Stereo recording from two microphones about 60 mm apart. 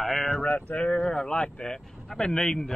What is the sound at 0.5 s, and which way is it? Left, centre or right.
Speech, left.